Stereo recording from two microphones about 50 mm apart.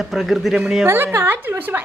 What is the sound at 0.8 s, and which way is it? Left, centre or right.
Speech, right.